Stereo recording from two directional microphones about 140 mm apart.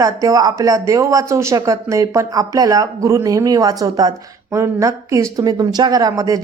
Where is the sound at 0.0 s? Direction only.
25° right (ahead or behind).